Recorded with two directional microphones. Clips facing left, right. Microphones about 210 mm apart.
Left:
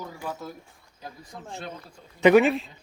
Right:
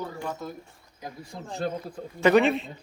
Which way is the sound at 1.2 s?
35° right (ahead or behind).